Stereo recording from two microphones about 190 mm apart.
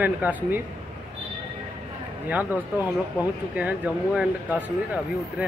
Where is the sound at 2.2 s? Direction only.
10° right (ahead or behind).